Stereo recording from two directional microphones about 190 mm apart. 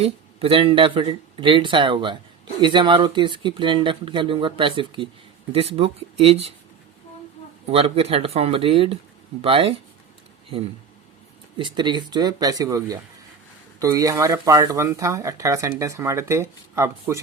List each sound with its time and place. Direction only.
0.0 s speech: 30° right (ahead or behind)
7.7 s speech: 30° right (ahead or behind)
11.5 s speech: 25° right (ahead or behind)